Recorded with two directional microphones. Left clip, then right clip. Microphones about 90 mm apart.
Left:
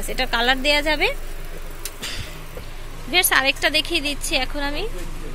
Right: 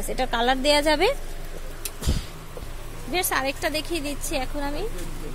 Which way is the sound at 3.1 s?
Centre (ahead or behind).